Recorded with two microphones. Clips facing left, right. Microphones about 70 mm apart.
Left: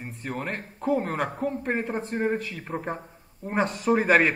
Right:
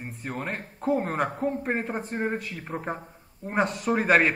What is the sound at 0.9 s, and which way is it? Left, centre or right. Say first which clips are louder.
Speech: right 1 dB; right.